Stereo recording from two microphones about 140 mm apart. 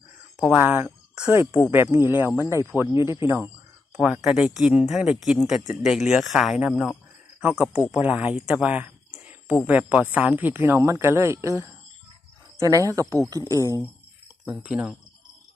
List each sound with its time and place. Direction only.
0.3 s speech: centre (ahead or behind)
0.6 s speech: 15° right (ahead or behind)
2.4 s speech: 25° left (ahead or behind)
2.9 s speech: 20° right (ahead or behind)
14.4 s speech: 10° right (ahead or behind)